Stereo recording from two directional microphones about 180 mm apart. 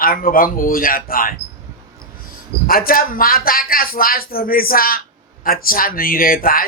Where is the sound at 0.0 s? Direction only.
50° left (ahead or behind).